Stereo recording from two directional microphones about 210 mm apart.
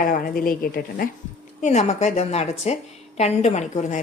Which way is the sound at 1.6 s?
30° left (ahead or behind).